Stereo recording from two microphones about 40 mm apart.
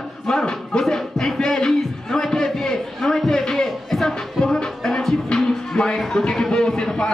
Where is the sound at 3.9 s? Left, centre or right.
Centre.